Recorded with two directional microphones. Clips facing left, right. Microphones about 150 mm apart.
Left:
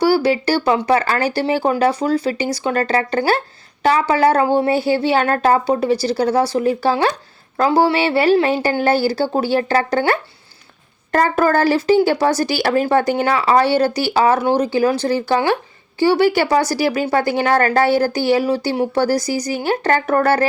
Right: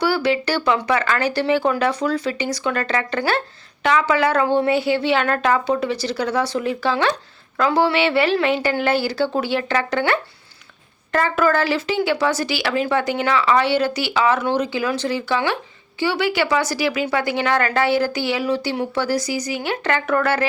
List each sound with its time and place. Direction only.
0.0 s speech: 35° left (ahead or behind)